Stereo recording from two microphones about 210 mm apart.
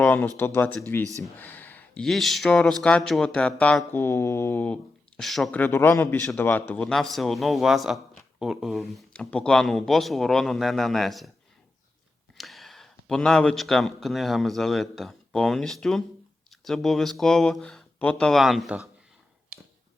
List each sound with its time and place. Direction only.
0.0 s speech: 10° left (ahead or behind)
12.4 s speech: centre (ahead or behind)